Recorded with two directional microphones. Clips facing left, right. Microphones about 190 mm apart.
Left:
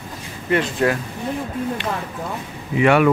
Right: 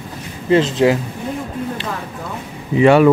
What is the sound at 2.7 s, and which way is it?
Speech, 30° right (ahead or behind).